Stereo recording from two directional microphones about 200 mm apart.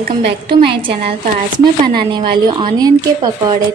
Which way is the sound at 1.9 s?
25° right (ahead or behind).